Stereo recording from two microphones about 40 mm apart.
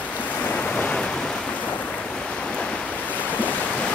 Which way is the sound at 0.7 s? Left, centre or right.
Left.